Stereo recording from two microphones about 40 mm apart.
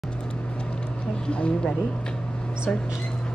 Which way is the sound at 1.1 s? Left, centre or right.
Left.